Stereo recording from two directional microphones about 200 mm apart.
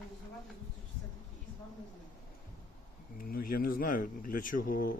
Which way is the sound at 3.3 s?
45° left (ahead or behind).